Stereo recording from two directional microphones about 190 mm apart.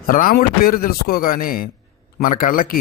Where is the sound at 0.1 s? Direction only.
50° left (ahead or behind).